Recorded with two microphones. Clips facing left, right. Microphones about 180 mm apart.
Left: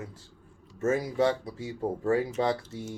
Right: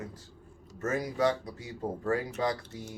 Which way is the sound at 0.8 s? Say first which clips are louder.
Left 3 dB; 25° left (ahead or behind).